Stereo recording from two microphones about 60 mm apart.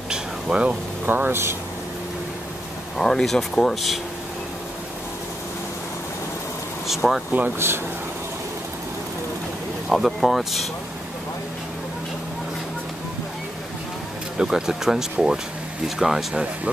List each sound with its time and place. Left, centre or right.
0.1 s a sound: centre
1.0 s speech: right
3.0 s speech: centre
6.9 s speech: centre
7.5 s speech: right
9.8 s speech: centre
14.4 s speech: centre